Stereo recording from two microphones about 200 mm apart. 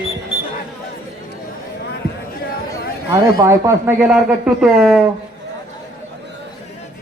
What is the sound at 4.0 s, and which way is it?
Speech, 5° right (ahead or behind).